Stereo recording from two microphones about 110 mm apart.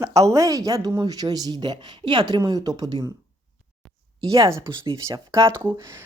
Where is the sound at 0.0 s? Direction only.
30° right (ahead or behind).